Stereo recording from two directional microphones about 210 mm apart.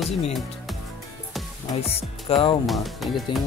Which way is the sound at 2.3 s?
25° left (ahead or behind).